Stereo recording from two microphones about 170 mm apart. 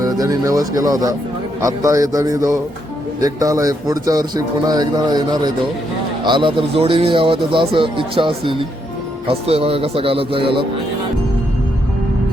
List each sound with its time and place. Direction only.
0.0 s speech: 20° right (ahead or behind)